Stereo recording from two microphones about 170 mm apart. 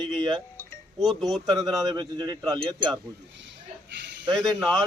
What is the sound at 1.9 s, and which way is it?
A man's voice, 25° right (ahead or behind).